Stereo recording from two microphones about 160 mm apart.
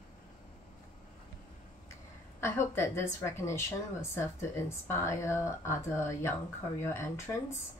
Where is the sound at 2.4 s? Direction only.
15° left (ahead or behind).